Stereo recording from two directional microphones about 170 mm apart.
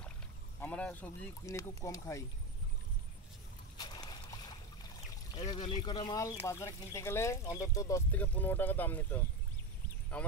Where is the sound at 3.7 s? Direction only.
25° left (ahead or behind).